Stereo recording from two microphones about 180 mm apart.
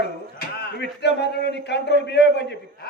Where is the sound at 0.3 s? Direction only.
70° left (ahead or behind).